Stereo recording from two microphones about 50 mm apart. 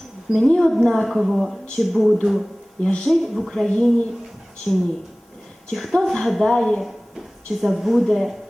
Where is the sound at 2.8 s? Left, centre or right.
Centre.